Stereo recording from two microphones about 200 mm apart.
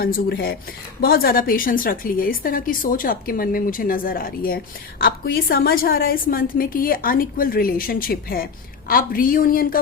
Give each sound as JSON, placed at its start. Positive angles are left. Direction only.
{"t": 0.0, "sound": "a woman's voice", "side_deg": 50}